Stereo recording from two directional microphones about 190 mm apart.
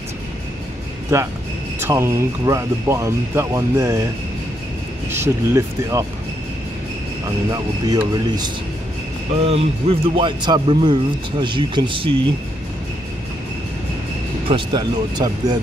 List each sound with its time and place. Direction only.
1.8 s speech: 15° right (ahead or behind)
5.1 s speech: 15° right (ahead or behind)
7.5 s speech: 20° right (ahead or behind)
9.4 s speech: 30° right (ahead or behind)
14.5 s speech: 25° right (ahead or behind)